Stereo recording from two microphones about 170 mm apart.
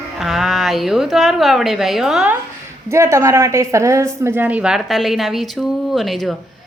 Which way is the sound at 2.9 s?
15° right (ahead or behind).